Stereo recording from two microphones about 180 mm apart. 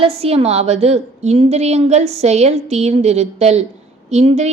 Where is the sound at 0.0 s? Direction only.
35° right (ahead or behind).